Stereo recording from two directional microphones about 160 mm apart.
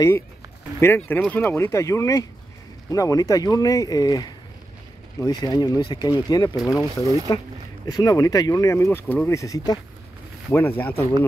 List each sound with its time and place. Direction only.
0.7 s speech: 15° left (ahead or behind)